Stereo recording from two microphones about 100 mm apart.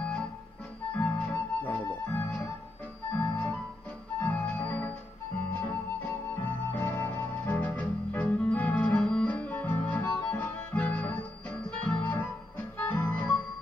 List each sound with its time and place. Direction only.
0.9 s music: 10° left (ahead or behind)